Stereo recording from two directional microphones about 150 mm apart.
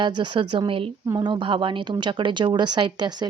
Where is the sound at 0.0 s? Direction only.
30° right (ahead or behind).